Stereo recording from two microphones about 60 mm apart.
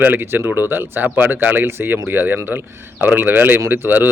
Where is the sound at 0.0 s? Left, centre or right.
Right.